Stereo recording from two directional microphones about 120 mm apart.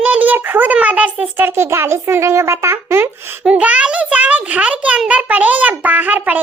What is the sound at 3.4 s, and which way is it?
A child's voice, 10° right (ahead or behind).